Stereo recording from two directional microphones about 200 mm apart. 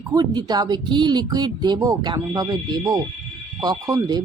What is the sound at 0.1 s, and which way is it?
Speech, 20° right (ahead or behind).